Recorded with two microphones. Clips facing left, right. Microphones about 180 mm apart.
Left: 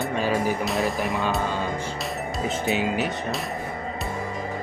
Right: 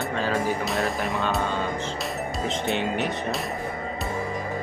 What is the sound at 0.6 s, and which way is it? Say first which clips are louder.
Speech: left 1 dB; centre (ahead or behind).